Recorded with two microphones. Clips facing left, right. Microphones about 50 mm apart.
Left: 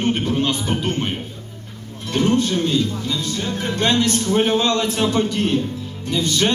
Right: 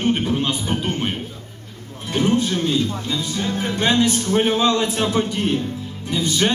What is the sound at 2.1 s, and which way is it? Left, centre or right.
Speech, centre.